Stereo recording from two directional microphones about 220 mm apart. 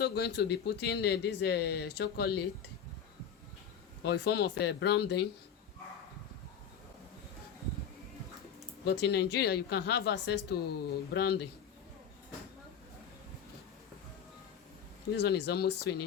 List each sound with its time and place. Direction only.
0.0 s speech: 50° left (ahead or behind)
4.0 s speech: 50° left (ahead or behind)
8.8 s speech: 50° left (ahead or behind)
15.1 s speech: 50° left (ahead or behind)